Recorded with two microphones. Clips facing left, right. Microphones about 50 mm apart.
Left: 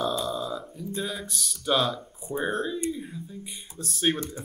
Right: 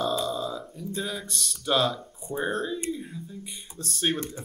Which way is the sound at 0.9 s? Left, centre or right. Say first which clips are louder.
Even; centre.